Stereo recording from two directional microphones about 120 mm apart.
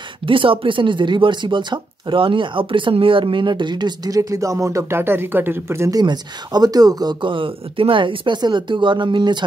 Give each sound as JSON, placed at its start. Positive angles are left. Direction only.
{"t": 0.3, "sound": "speech", "side_deg": -45}